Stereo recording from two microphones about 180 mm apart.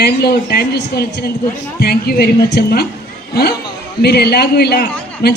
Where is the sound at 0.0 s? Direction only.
60° left (ahead or behind).